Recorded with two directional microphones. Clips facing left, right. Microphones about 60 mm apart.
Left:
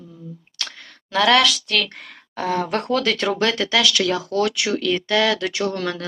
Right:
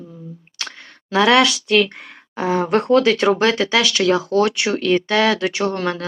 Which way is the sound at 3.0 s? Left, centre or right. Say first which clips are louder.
Right 5 dB; right.